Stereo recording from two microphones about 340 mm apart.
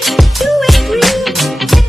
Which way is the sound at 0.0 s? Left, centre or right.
Centre.